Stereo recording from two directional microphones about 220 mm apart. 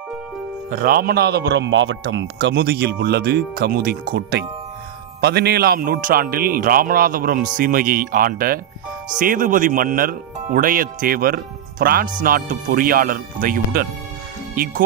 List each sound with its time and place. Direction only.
0.7 s speech: 40° right (ahead or behind)
1.5 s speech: 55° right (ahead or behind); by 14.8 s 40° right (ahead or behind)